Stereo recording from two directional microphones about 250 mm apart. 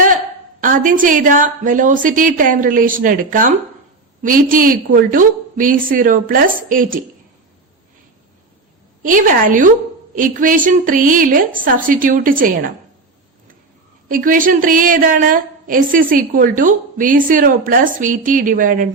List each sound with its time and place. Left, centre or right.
0.6 s a woman's voice: right
9.0 s a woman's voice: right
14.1 s a woman's voice: right